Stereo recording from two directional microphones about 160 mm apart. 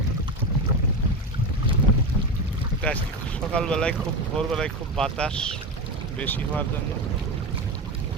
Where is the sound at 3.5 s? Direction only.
5° left (ahead or behind).